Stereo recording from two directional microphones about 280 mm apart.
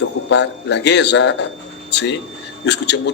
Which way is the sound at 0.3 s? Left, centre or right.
Left.